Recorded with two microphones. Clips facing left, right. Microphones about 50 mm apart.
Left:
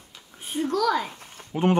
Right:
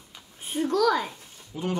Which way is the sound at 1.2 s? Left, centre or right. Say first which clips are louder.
Left 8 dB; left.